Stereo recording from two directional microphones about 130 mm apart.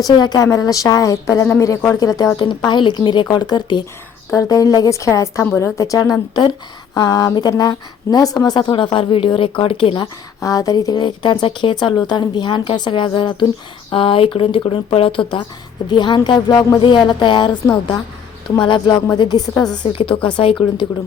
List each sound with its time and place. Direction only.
0.0 s speech: 30° left (ahead or behind)
4.3 s speech: 25° left (ahead or behind); by 10.0 s 40° left (ahead or behind)
10.0 s speech: 25° left (ahead or behind); by 20.8 s 40° left (ahead or behind)